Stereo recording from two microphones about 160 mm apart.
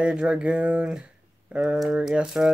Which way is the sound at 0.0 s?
5° right (ahead or behind).